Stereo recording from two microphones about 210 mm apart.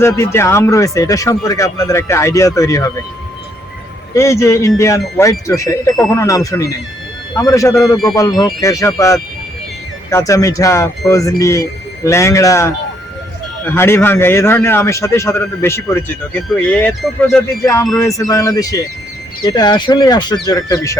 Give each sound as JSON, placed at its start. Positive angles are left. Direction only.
{"t": 0.0, "sound": "a man's voice", "side_deg": 10}
{"t": 4.1, "sound": "a man's voice", "side_deg": 15}
{"t": 10.1, "sound": "a man's voice", "side_deg": 15}